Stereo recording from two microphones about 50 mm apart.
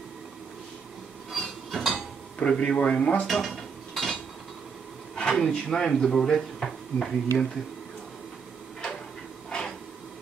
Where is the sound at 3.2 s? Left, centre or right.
Centre.